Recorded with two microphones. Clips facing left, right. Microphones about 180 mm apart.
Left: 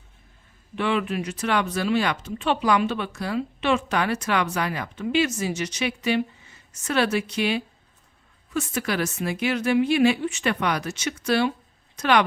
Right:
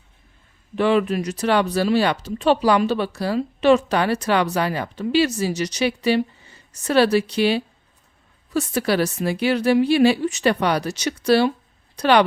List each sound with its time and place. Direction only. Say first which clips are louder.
0.8 s speech: right 6 dB; 40° right (ahead or behind)